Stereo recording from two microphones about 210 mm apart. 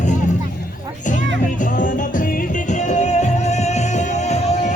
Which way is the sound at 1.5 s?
40° left (ahead or behind).